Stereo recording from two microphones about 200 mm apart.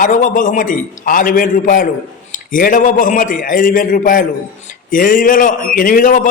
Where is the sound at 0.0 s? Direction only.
40° left (ahead or behind).